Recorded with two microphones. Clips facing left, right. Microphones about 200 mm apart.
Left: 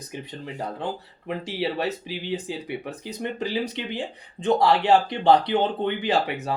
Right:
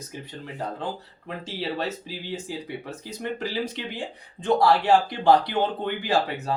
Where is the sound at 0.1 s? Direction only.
20° left (ahead or behind).